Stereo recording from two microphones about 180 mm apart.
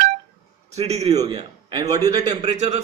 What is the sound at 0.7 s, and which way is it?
A man's voice, 35° right (ahead or behind).